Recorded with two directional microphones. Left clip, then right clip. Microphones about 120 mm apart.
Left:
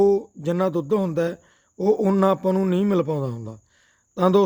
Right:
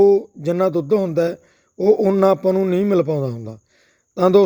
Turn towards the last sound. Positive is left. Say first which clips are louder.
# right 5 dB
turn(degrees=-35)  # may be behind; listen again after turning